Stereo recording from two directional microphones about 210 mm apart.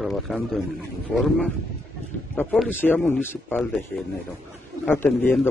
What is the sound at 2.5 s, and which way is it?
A man's voice, 5° left (ahead or behind).